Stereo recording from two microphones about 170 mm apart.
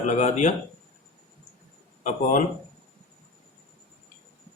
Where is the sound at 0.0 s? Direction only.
45° left (ahead or behind).